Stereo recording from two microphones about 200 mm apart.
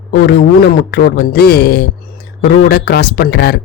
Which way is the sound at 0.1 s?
55° left (ahead or behind).